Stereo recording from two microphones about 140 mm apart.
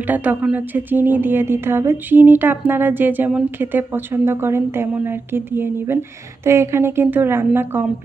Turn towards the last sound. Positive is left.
turn(degrees=-15)  # may be behind; listen again after turning